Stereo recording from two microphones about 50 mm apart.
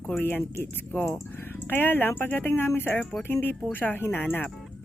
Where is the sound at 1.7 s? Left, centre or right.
Left.